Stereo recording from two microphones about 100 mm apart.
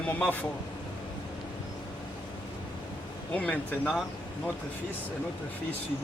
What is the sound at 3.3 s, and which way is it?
Speech, 15° left (ahead or behind).